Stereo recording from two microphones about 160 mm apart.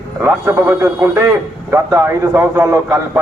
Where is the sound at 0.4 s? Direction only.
15° right (ahead or behind).